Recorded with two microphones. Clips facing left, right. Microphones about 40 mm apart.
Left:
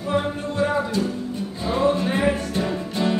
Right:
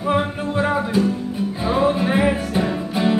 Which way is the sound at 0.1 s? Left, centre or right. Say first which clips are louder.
Right 3 dB; right.